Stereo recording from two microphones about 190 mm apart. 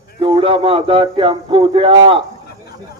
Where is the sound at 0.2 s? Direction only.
25° right (ahead or behind).